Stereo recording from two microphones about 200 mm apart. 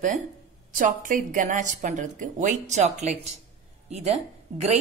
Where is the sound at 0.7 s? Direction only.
40° right (ahead or behind).